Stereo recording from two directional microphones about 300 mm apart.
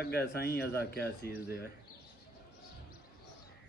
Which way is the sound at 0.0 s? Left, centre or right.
Left.